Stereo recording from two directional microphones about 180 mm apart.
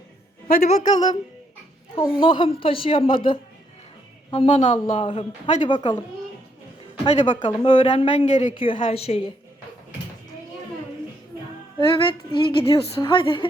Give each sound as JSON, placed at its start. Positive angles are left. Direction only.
{"t": 0.6, "sound": "a woman's voice", "side_deg": 40}
{"t": 2.0, "sound": "a woman's voice", "side_deg": 25}
{"t": 4.3, "sound": "a woman's voice", "side_deg": 30}
{"t": 7.0, "sound": "a woman's voice", "side_deg": 30}
{"t": 11.8, "sound": "a woman's voice", "side_deg": 30}